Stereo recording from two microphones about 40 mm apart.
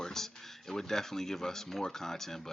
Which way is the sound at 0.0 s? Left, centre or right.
Centre.